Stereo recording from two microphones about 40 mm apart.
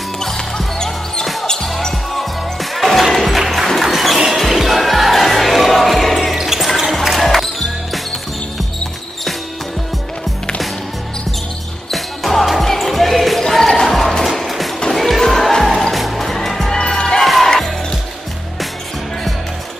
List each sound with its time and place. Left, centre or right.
0.2 s music: centre
1.2 s music: centre
6.3 s basketball bounce: centre
6.8 s music: centre
11.9 s music: centre
13.4 s music: centre
14.2 s music: centre
16.7 s music: centre